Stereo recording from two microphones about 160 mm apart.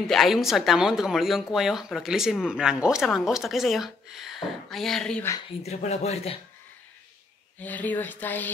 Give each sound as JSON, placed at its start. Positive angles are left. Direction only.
{"t": 0.0, "sound": "speech", "side_deg": 0}
{"t": 5.6, "sound": "speech", "side_deg": 45}
{"t": 7.5, "sound": "speech", "side_deg": 10}